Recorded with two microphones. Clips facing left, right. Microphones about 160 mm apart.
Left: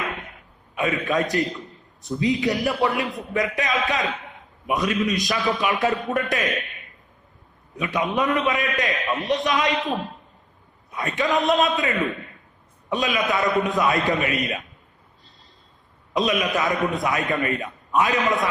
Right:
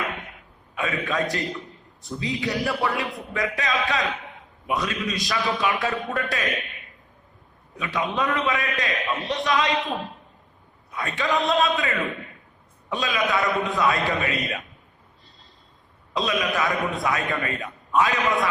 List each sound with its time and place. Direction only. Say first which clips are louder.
0.8 s a man's voice: left 3 dB; 20° left (ahead or behind)
7.8 s a man's voice: left 3 dB; 20° left (ahead or behind)
10.9 s a man's voice: left 2 dB; 20° left (ahead or behind)
16.1 s a man's voice: left 3 dB; 20° left (ahead or behind)